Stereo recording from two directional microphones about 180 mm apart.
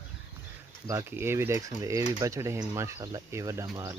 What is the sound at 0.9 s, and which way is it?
Speech, 15° right (ahead or behind).